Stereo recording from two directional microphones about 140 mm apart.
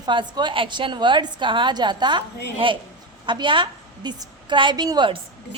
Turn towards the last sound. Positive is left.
turn(degrees=-35)  # may be behind; listen again after turning